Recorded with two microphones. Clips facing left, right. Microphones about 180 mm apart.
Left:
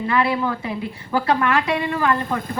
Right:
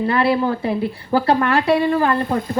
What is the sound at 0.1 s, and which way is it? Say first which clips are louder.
Speech: right 1 dB; 35° right (ahead or behind).